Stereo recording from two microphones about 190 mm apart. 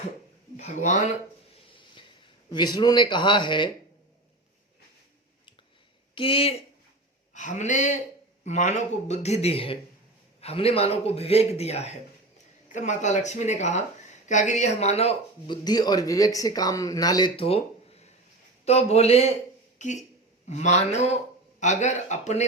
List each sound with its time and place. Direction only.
0.5 s speech: 40° left (ahead or behind)
2.0 s speech: 25° left (ahead or behind)
6.1 s speech: 30° left (ahead or behind)
15.6 s speech: 20° left (ahead or behind)
20.5 s speech: 35° left (ahead or behind)